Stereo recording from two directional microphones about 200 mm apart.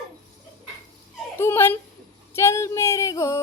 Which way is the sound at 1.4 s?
10° left (ahead or behind).